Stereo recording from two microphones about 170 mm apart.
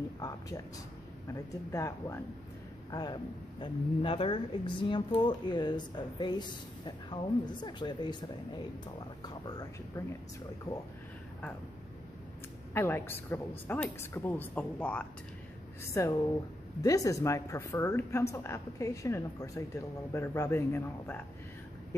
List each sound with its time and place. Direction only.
1.3 s speech: 20° left (ahead or behind)
12.7 s speech: 15° left (ahead or behind)